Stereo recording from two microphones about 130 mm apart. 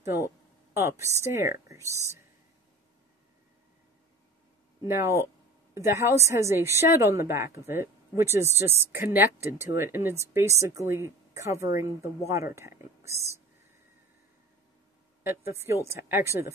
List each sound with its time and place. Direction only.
0.0 s a woman's voice: 20° right (ahead or behind)
4.8 s a woman's voice: 20° right (ahead or behind)
15.2 s a woman's voice: 20° right (ahead or behind)